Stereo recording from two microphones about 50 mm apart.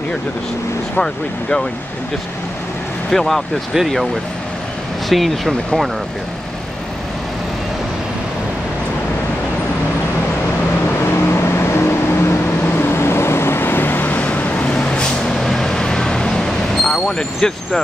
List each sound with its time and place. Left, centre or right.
0.9 s speech: centre
3.1 s speech: centre
3.7 s speech: centre
5.1 s speech: centre
11.1 s vehicle: left
12.6 s vehicle: left
14.2 s vehicle: left
15.3 s vehicle: centre